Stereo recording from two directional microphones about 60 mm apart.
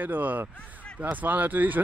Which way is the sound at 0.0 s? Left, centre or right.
Right.